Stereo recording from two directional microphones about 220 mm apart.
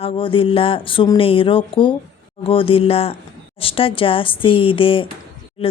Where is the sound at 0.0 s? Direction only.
25° left (ahead or behind).